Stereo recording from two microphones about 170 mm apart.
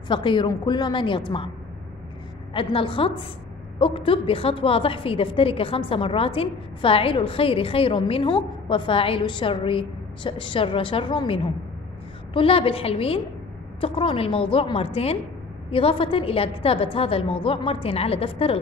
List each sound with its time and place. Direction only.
0.1 s a woman's voice: 30° left (ahead or behind)
2.5 s a woman's voice: 30° left (ahead or behind)